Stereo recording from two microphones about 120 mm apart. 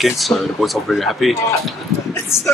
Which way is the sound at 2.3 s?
20° left (ahead or behind).